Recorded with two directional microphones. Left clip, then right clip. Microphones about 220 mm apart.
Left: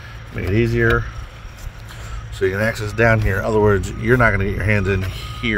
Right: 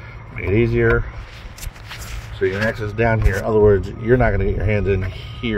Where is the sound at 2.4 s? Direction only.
10° left (ahead or behind).